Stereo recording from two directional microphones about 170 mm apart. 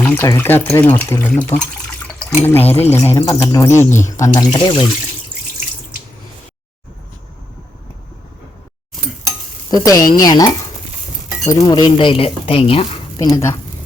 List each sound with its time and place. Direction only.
0.0 s speech: 15° left (ahead or behind)
4.5 s speech: 30° left (ahead or behind)
9.6 s a woman's voice: 25° left (ahead or behind)
13.1 s speech: 20° left (ahead or behind)